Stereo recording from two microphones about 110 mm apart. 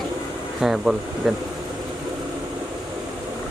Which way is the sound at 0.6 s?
5° right (ahead or behind).